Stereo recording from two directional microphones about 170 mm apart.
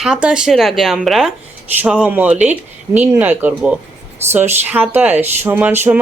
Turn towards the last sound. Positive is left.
turn(degrees=-10)  # may be behind; listen again after turning